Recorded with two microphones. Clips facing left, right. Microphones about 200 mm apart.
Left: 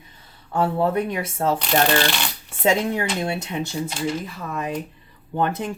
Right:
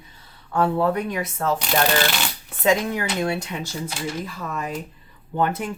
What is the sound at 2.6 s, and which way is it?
Speech, 25° left (ahead or behind).